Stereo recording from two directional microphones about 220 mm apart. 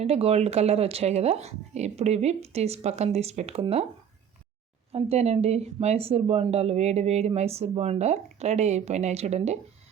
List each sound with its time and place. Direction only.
0.0 s speech: 30° right (ahead or behind)
4.9 s speech: 25° right (ahead or behind)